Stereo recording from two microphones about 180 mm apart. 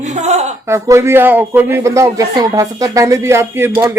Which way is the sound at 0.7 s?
15° right (ahead or behind).